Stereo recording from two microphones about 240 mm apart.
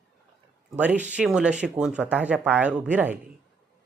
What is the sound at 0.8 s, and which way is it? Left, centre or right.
Speech, centre.